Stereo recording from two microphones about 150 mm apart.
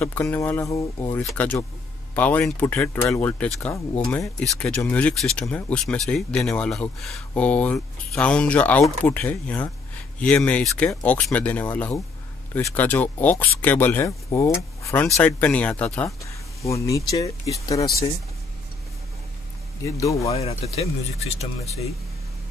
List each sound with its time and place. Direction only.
0.0 s speech: 10° left (ahead or behind)
1.2 s speech: 10° left (ahead or behind)
3.4 s speech: centre (ahead or behind)
14.8 s vehicle: 20° left (ahead or behind)
15.1 s speech: 10° left (ahead or behind)
16.6 s speech: 20° left (ahead or behind)
19.8 s speech: 20° left (ahead or behind)
20.3 s speech: 45° left (ahead or behind)